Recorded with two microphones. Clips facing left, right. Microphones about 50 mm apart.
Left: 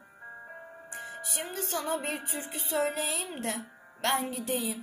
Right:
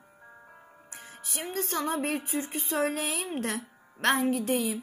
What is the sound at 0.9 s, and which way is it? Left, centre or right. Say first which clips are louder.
Music: left 6 dB; left.